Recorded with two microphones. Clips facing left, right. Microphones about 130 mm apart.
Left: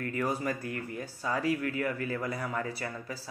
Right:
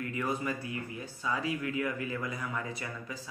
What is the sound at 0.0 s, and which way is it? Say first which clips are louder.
Speech: left 2 dB; 45° left (ahead or behind).